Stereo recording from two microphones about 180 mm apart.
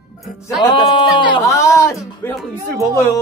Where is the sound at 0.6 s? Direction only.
25° left (ahead or behind).